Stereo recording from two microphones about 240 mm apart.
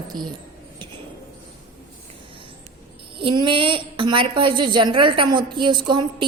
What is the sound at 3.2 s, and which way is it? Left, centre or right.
A woman's voice, right.